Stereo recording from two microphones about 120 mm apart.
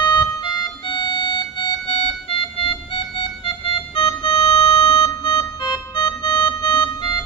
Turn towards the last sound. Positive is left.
turn(degrees=40)  # may be behind; listen again after turning